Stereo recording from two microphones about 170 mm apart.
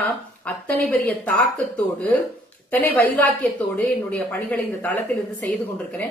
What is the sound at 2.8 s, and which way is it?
A woman's voice, 10° left (ahead or behind).